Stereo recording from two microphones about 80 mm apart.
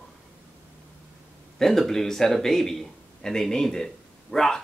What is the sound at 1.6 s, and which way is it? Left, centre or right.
A man's voice, centre.